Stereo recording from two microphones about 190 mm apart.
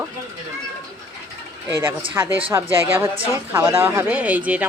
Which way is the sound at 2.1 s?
10° right (ahead or behind).